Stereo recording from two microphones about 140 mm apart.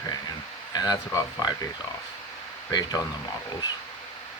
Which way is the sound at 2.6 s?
30° left (ahead or behind).